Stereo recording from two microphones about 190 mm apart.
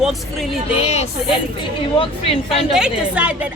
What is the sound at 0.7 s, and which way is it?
A woman's voice, 35° left (ahead or behind).